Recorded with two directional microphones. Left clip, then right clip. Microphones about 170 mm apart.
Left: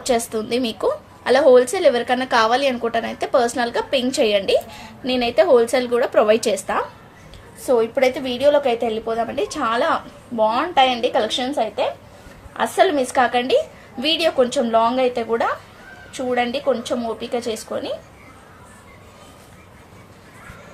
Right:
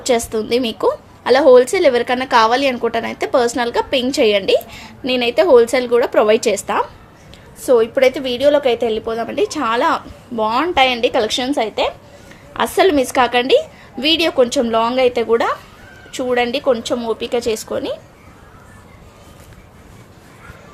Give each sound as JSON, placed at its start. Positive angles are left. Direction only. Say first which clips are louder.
{"t": 0.0, "sound": "a woman's voice", "louder": "right 4 dB", "side_deg": -30}